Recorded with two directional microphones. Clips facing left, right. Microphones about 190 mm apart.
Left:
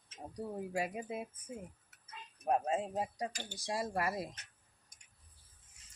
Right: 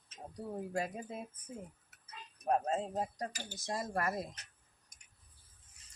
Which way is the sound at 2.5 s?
10° left (ahead or behind).